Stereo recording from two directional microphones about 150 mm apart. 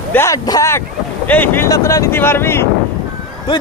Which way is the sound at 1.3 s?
10° left (ahead or behind).